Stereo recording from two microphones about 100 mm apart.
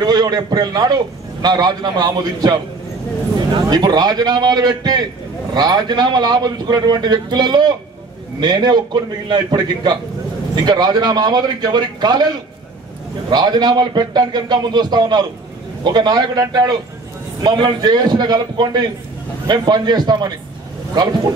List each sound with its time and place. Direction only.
0.0 s a man's voice: 45° right (ahead or behind)